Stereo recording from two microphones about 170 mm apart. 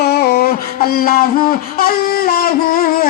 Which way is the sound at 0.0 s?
70° left (ahead or behind).